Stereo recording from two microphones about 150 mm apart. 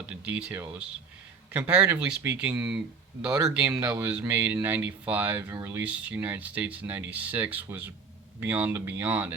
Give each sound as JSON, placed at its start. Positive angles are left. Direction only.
{"t": 0.1, "sound": "speech", "side_deg": -10}